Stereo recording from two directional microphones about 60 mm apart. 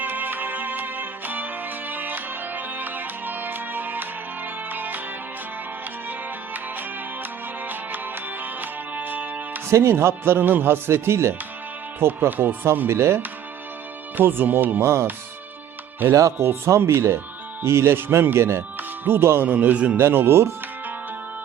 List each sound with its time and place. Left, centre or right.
0.0 s music: right
6.1 s music: right
9.6 s speech: right
12.9 s speech: right
14.2 s speech: right
16.0 s speech: right
16.4 s speech: right
19.5 s a man's voice: right
20.0 s speech: right